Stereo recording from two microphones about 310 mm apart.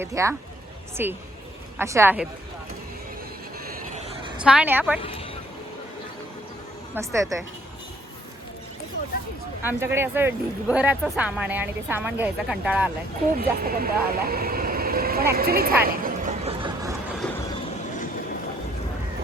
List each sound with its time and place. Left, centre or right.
0.0 s a woman's voice: centre
4.4 s speech: centre
6.9 s a woman's voice: centre
9.6 s speech: centre
13.6 s speech: right
15.8 s a sound: right